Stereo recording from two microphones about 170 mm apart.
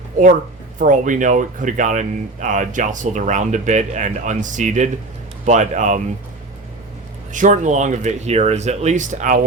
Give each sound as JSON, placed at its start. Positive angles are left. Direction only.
{"t": 0.8, "sound": "speech", "side_deg": -50}
{"t": 7.3, "sound": "speech", "side_deg": -45}